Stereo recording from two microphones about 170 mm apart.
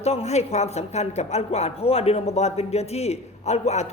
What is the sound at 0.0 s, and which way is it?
A woman's voice, 40° left (ahead or behind).